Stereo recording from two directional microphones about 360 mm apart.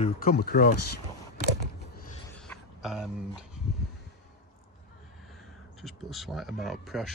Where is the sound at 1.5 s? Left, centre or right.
Left.